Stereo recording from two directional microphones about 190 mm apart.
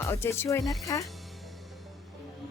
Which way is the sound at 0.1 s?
10° left (ahead or behind).